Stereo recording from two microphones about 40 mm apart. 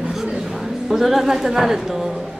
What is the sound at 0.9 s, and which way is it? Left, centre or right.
Speech, centre.